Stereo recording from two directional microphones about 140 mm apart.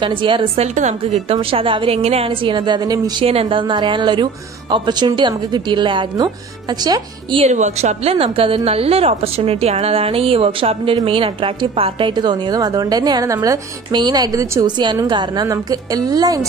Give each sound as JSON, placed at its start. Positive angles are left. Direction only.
{"t": 0.0, "sound": "speech", "side_deg": -35}
{"t": 0.7, "sound": "speech", "side_deg": -50}
{"t": 3.3, "sound": "speech", "side_deg": -40}
{"t": 7.3, "sound": "a woman's voice", "side_deg": -55}